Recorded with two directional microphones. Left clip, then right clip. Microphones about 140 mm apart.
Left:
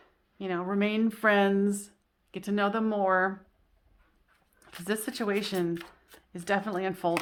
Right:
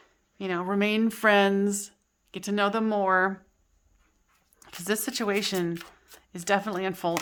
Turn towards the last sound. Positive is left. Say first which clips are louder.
# right 1 dB
turn(degrees=-20)  # may be behind; listen again after turning